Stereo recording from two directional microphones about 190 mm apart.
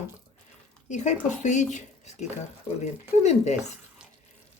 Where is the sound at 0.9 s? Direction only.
40° left (ahead or behind).